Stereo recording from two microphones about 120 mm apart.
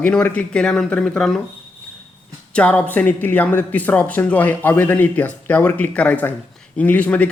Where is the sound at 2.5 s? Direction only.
10° left (ahead or behind).